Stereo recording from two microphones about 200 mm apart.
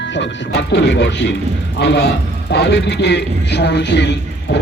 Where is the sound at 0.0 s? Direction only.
60° left (ahead or behind).